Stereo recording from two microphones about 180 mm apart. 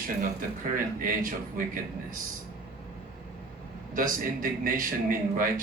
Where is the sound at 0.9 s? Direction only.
50° right (ahead or behind).